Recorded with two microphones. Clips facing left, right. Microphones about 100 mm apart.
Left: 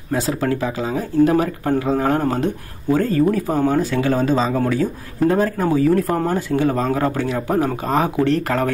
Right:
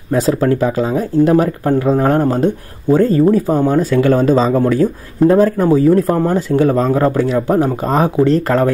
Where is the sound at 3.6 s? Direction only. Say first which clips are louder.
Right 5 dB; 45° right (ahead or behind).